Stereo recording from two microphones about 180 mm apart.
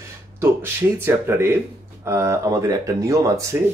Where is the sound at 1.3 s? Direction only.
15° right (ahead or behind).